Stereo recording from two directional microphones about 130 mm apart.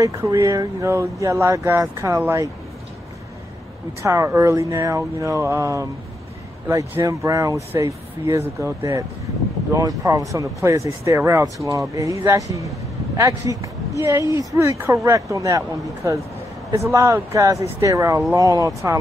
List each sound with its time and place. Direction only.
0.0 s speech: 25° right (ahead or behind)
4.0 s speech: 25° right (ahead or behind)